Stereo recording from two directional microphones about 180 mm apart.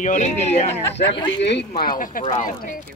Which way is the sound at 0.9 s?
25° left (ahead or behind).